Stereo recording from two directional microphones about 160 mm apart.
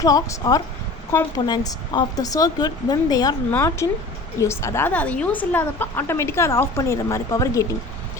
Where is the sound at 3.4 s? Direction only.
15° left (ahead or behind).